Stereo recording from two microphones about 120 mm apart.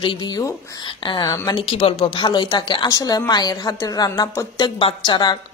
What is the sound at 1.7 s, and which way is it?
A woman's voice, 50° left (ahead or behind).